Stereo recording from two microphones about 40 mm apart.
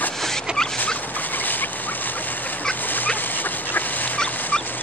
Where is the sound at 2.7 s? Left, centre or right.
Left.